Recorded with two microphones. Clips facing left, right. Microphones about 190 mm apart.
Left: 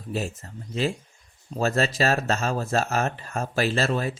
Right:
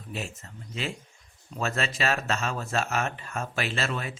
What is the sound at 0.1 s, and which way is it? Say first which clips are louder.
Speech: left 7 dB; 40° left (ahead or behind).